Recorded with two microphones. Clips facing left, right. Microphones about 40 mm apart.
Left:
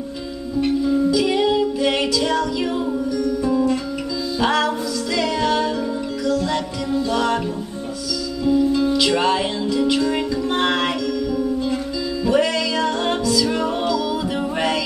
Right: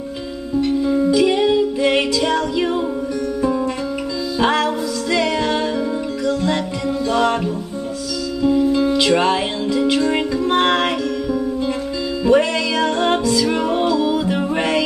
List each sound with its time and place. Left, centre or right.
0.8 s music: centre
3.4 s music: right
8.4 s music: centre